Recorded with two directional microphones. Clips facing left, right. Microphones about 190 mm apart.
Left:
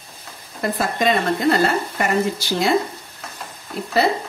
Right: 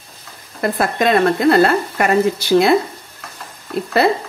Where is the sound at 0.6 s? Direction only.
60° right (ahead or behind).